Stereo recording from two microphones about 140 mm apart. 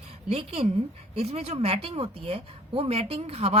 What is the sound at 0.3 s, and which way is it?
A woman's voice, 45° right (ahead or behind).